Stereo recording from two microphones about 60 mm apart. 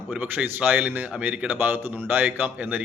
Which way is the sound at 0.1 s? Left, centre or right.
Right.